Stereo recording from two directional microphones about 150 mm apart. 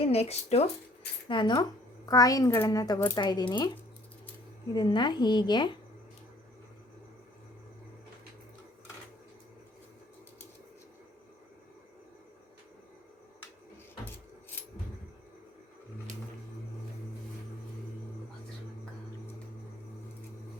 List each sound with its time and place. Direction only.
0.0 s speech: 45° left (ahead or behind)
1.3 s a woman's voice: 30° left (ahead or behind)
4.7 s a woman's voice: 30° left (ahead or behind)